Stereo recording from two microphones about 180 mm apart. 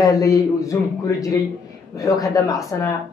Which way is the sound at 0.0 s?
20° left (ahead or behind).